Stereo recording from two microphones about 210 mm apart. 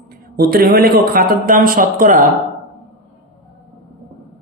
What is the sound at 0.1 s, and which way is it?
A man's voice, 45° right (ahead or behind).